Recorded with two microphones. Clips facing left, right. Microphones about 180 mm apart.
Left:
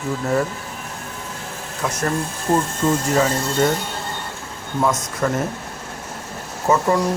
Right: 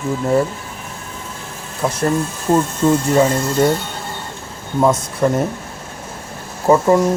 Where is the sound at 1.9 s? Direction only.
30° right (ahead or behind).